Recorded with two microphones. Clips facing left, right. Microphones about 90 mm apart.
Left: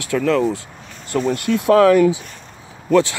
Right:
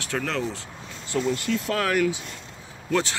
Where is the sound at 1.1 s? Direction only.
50° left (ahead or behind).